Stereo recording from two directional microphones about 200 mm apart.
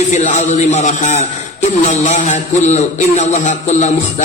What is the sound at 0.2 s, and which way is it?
A man's voice, 35° left (ahead or behind).